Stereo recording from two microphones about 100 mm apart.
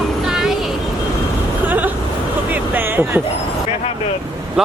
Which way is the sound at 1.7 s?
20° right (ahead or behind).